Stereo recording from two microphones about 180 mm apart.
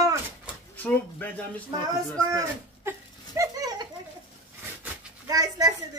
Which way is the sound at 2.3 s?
15° right (ahead or behind).